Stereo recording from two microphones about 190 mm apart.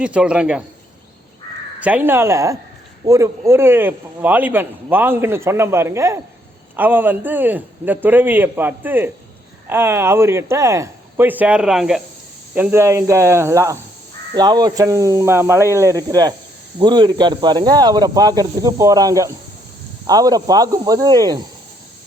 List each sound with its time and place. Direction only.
0.0 s speech: 5° right (ahead or behind)
1.8 s speech: 10° right (ahead or behind)